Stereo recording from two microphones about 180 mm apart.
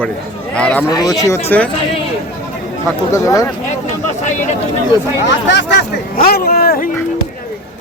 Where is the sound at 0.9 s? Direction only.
20° left (ahead or behind).